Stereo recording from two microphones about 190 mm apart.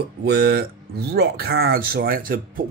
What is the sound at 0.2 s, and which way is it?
Speech, 60° right (ahead or behind).